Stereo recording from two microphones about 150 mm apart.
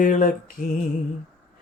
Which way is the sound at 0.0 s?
60° left (ahead or behind).